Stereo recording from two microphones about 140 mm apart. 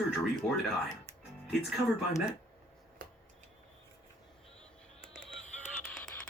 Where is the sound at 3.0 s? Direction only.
90° right.